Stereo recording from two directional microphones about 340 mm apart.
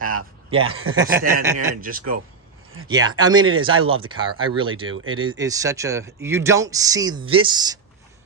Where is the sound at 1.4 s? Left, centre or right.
Centre.